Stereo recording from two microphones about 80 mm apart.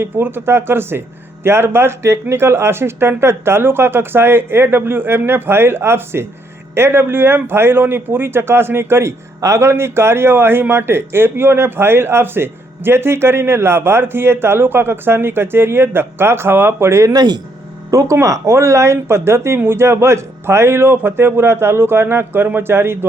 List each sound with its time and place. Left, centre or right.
0.0 s a man's voice: right
17.1 s speech: right
17.9 s speech: right